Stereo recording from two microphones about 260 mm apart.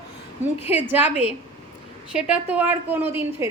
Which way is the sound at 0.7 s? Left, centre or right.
Centre.